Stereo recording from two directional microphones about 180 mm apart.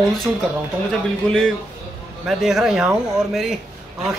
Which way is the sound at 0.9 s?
5° left (ahead or behind).